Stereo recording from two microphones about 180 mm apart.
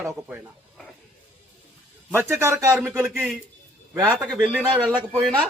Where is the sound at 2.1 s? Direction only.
15° right (ahead or behind).